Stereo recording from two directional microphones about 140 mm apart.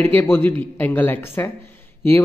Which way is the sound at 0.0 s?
15° left (ahead or behind).